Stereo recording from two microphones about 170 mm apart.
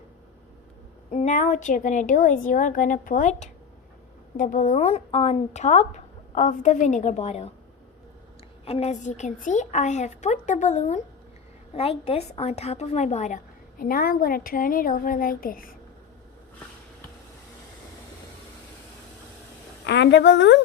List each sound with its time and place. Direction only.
1.1 s a woman's voice: 45° left (ahead or behind)
8.6 s a woman's voice: 40° left (ahead or behind); by 15.7 s 55° left (ahead or behind)
19.8 s speech: 90° left